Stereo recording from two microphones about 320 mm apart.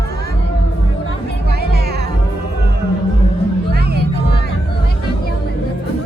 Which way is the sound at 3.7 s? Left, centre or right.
Right.